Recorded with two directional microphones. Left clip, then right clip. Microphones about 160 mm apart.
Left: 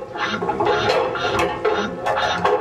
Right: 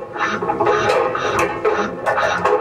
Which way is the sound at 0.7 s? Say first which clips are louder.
Right 3 dB; centre (ahead or behind).